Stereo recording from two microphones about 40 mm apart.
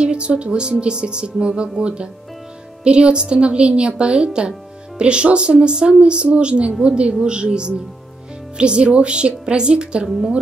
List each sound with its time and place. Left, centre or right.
0.0 s a woman's voice: right
10.0 s speech: centre